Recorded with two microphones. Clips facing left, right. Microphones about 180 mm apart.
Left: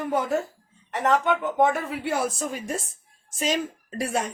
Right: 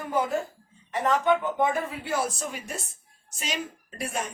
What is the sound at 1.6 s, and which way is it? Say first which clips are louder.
Speech: left 4 dB; 65° left (ahead or behind).